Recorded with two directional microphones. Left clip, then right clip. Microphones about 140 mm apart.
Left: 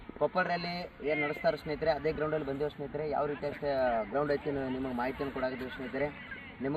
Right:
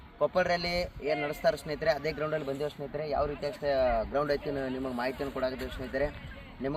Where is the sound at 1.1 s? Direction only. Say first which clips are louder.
Right 1 dB; 30° right (ahead or behind).